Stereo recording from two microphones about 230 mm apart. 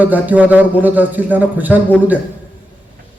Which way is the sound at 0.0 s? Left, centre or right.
Centre.